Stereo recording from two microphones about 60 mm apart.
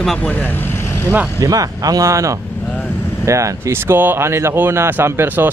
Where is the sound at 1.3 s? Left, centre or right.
Right.